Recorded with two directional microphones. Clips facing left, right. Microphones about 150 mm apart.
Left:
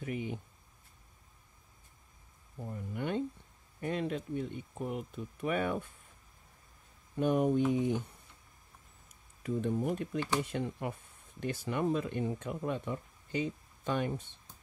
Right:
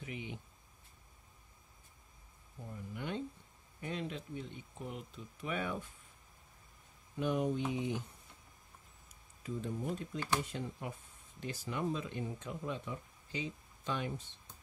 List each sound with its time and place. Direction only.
0.0 s speech: 45° left (ahead or behind)
2.9 s speech: 55° left (ahead or behind)
7.2 s speech: 50° left (ahead or behind)
9.4 s speech: 65° left (ahead or behind)